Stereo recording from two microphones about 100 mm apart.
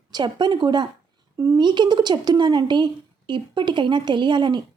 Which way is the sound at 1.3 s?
35° right (ahead or behind).